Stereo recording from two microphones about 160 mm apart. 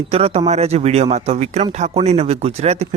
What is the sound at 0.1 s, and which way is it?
Speech, 40° right (ahead or behind).